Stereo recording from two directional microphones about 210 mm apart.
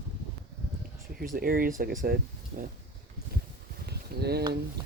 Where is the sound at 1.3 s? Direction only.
45° right (ahead or behind).